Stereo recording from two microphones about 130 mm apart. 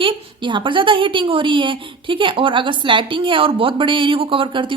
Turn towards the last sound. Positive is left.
turn(degrees=-40)  # may be behind; listen again after turning